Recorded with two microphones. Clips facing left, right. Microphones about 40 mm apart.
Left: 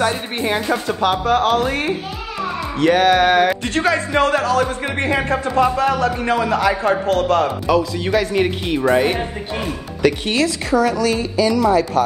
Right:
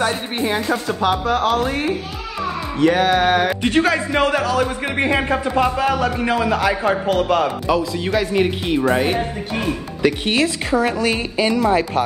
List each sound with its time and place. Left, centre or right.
0.4 s speech: centre
3.1 s speech: centre
3.8 s a man's voice: centre
6.1 s a man's voice: centre
10.2 s a woman's voice: right